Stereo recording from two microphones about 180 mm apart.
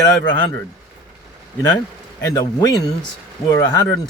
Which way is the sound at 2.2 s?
20° left (ahead or behind).